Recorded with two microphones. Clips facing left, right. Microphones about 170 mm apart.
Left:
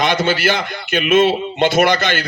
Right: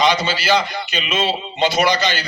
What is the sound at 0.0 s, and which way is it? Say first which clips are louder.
A man's voice: left 2 dB; 50° left (ahead or behind).